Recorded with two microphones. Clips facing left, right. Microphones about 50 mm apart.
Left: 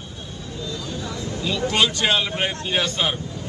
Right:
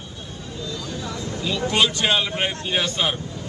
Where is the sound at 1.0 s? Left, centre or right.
Right.